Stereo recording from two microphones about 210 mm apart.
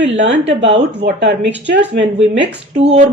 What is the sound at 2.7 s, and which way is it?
Speech, 30° right (ahead or behind).